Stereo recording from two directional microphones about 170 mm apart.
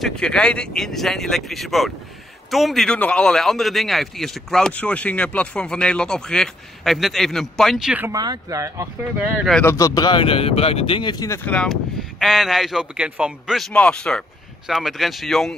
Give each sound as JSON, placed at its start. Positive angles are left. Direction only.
{"t": 0.0, "sound": "a man's voice", "side_deg": 5}
{"t": 8.1, "sound": "speech", "side_deg": -20}
{"t": 9.6, "sound": "a man's voice", "side_deg": 15}